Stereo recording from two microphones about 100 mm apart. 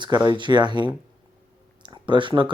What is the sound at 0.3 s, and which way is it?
Speech, 50° right (ahead or behind).